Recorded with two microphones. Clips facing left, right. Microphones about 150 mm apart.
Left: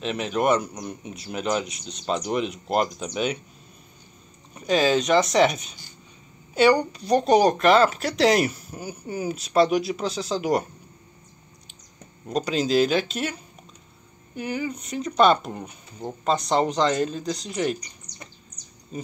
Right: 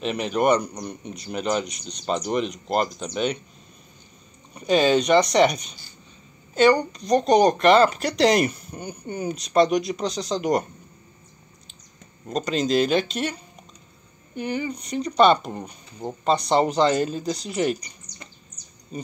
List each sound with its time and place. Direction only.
0.0 s speech: centre (ahead or behind)
4.6 s speech: centre (ahead or behind)
12.3 s speech: 5° left (ahead or behind)